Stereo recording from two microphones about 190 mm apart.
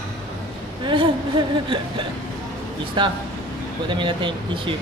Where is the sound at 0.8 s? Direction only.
25° right (ahead or behind).